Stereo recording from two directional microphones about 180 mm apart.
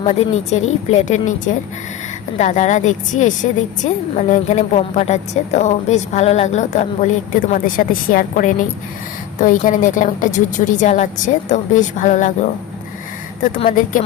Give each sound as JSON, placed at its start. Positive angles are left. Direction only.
{"t": 0.0, "sound": "a woman's voice", "side_deg": 40}
{"t": 13.7, "sound": "a woman's voice", "side_deg": 50}